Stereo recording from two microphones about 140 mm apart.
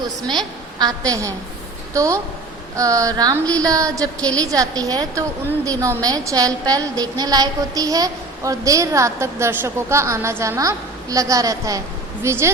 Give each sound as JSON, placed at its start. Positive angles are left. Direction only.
{"t": 0.3, "sound": "a woman's voice", "side_deg": -30}